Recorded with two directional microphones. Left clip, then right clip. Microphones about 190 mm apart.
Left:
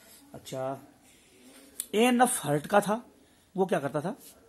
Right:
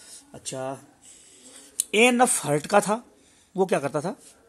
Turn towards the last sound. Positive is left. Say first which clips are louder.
# right 4 dB
turn(degrees=-35)  # may be behind; listen again after turning